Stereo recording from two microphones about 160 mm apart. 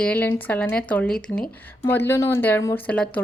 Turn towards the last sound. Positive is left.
turn(degrees=10)  # may be behind; listen again after turning